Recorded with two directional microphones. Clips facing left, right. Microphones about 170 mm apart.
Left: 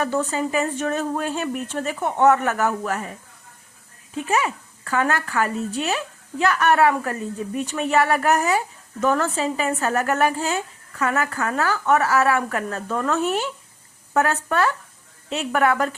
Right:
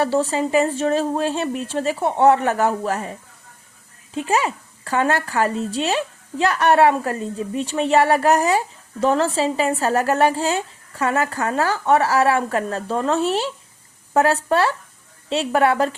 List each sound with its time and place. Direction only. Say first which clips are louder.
0.0 s speech: right 3 dB; 30° right (ahead or behind)
4.1 s speech: right 2 dB; 30° right (ahead or behind)